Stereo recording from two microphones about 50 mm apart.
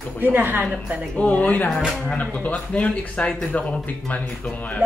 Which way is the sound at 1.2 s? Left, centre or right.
Left.